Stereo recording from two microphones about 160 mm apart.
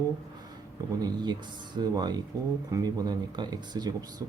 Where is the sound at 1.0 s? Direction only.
25° right (ahead or behind).